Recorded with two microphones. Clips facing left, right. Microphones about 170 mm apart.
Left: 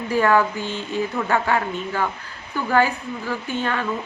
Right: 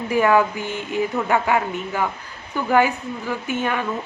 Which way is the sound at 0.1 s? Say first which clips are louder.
Right 1 dB; 15° right (ahead or behind).